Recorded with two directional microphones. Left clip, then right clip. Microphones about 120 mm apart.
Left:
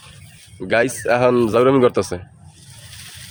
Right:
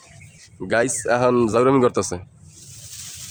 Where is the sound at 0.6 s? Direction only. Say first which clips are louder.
Left 3 dB; 10° right (ahead or behind).